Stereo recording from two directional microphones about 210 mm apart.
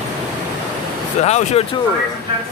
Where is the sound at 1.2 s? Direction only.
30° left (ahead or behind).